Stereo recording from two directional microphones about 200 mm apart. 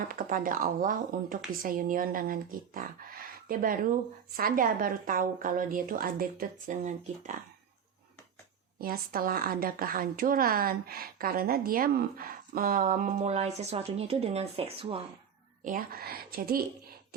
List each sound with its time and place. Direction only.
0.1 s a woman's voice: 45° right (ahead or behind)
8.8 s a woman's voice: 50° right (ahead or behind); by 15.0 s 30° right (ahead or behind)
15.6 s a woman's voice: 45° right (ahead or behind)